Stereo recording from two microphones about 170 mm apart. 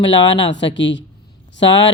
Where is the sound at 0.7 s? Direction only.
90° left.